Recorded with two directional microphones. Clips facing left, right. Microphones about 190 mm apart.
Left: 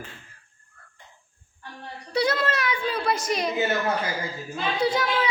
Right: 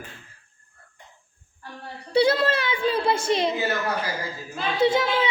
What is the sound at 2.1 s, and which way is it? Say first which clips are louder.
A child's voice: right 4 dB; 30° right (ahead or behind).